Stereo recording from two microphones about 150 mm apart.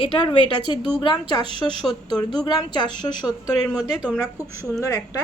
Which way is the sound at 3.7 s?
5° right (ahead or behind).